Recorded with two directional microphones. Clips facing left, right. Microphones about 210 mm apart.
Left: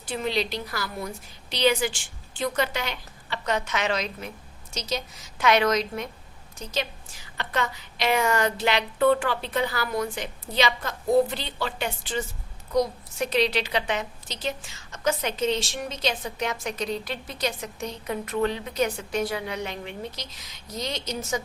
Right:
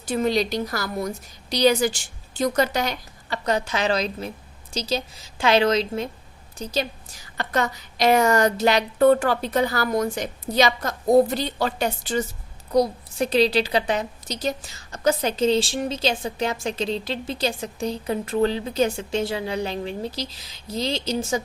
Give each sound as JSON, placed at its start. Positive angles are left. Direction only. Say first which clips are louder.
{"t": 0.0, "sound": "a woman's voice", "louder": "right 6 dB", "side_deg": -45}